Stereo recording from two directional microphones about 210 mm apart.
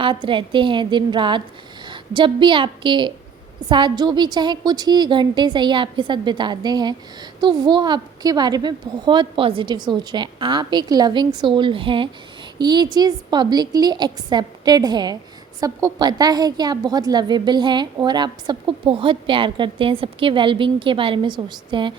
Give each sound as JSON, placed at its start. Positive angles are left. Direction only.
{"t": 0.0, "sound": "a woman's voice", "side_deg": -25}